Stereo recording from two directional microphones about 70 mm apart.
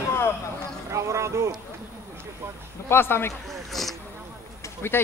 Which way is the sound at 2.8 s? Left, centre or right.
Left.